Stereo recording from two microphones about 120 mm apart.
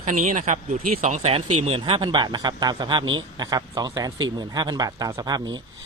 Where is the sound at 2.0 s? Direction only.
40° right (ahead or behind).